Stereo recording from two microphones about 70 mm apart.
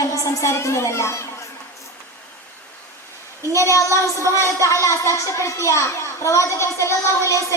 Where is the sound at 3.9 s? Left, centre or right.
Right.